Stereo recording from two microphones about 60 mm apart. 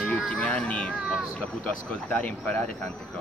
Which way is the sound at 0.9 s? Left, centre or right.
Centre.